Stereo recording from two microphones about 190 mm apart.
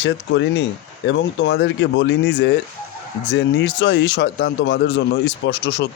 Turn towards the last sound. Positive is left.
turn(degrees=65)  # may be behind; listen again after turning